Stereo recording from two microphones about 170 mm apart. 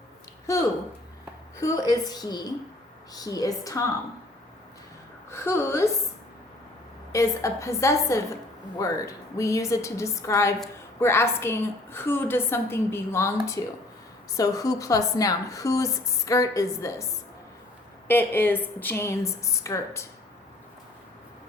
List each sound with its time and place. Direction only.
0.5 s a woman's voice: 15° left (ahead or behind)
5.3 s a woman's voice: 15° left (ahead or behind)
7.1 s a woman's voice: 20° left (ahead or behind)
18.1 s a woman's voice: 10° left (ahead or behind)